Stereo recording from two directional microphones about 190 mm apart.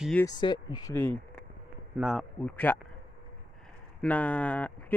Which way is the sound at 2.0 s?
Centre (ahead or behind).